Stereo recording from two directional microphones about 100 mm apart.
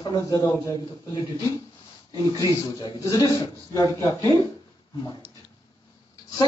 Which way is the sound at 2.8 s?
40° left (ahead or behind).